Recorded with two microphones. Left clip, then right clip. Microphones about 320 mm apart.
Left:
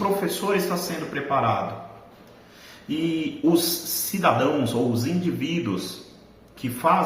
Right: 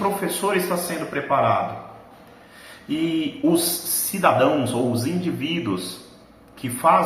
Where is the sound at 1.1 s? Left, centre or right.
Centre.